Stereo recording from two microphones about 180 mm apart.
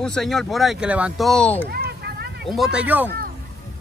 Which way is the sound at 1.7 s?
60° right (ahead or behind).